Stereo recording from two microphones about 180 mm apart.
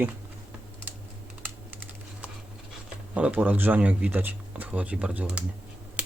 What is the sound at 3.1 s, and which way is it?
Speech, 10° right (ahead or behind).